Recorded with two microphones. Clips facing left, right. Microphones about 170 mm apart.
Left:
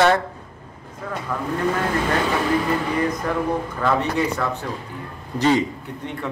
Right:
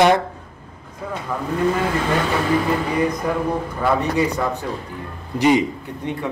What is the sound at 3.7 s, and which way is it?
A man's voice, 10° right (ahead or behind).